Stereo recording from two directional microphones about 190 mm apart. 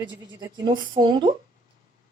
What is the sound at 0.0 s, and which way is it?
Speech, 25° right (ahead or behind).